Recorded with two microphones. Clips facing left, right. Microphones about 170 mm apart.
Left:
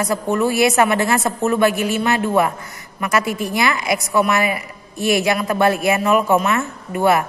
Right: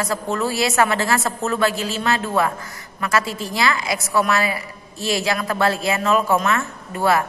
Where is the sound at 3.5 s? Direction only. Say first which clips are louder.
Even; 20° left (ahead or behind).